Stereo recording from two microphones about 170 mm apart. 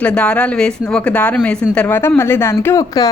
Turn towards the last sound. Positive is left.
turn(degrees=20)  # may be behind; listen again after turning